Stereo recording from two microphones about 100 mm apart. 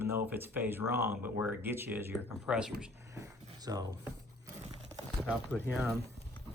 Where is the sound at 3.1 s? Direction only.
40° right (ahead or behind).